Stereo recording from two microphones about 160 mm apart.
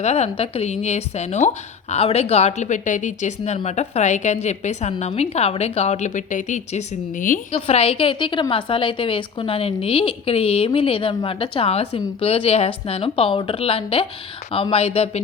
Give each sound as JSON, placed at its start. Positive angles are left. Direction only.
{"t": 0.0, "sound": "a woman's voice", "side_deg": 40}
{"t": 7.5, "sound": "a woman's voice", "side_deg": 40}